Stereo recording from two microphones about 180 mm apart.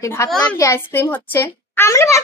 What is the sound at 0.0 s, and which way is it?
A child's voice, 15° left (ahead or behind).